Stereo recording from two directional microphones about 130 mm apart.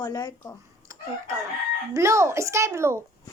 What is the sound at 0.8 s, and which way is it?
Chicken, 25° right (ahead or behind).